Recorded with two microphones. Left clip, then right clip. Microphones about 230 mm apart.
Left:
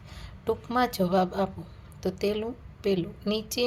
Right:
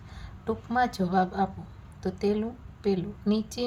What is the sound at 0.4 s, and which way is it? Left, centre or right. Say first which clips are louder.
A woman's voice: even; left.